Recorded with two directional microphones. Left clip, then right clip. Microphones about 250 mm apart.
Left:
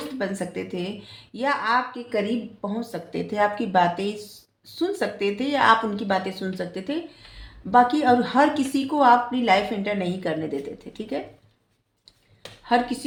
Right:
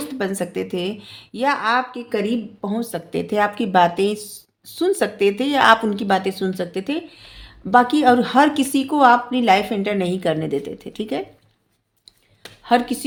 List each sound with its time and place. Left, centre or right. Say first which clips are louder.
0.2 s a woman's voice: right 5 dB; right
12.6 s speech: right 4 dB; right